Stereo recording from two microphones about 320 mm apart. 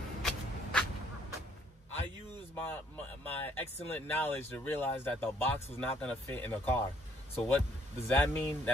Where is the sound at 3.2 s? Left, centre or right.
Centre.